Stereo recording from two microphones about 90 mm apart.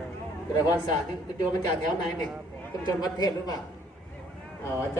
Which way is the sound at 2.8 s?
45° left (ahead or behind).